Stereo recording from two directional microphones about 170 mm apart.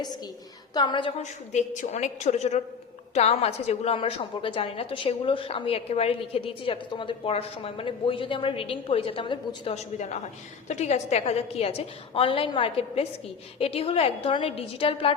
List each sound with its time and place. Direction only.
0.7 s a woman's voice: 25° left (ahead or behind)
1.2 s a woman's voice: 45° left (ahead or behind)